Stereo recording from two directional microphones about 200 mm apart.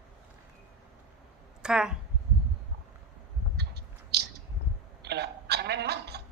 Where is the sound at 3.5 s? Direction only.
55° right (ahead or behind).